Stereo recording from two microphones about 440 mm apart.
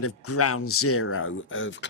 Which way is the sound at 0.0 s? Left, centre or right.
Left.